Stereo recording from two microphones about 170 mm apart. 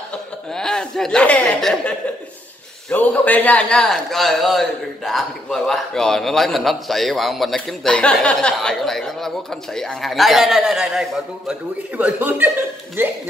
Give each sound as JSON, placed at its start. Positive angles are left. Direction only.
{"t": 0.5, "sound": "a man's voice", "side_deg": 5}